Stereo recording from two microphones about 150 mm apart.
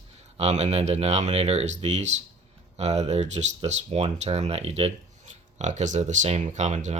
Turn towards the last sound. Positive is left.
turn(degrees=-50)  # may be behind; listen again after turning